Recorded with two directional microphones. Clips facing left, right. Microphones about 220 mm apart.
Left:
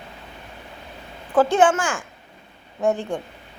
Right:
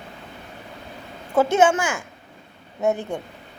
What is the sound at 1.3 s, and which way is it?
Speech, 10° right (ahead or behind).